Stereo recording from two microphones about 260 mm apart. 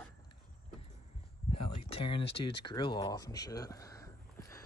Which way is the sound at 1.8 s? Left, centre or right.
Left.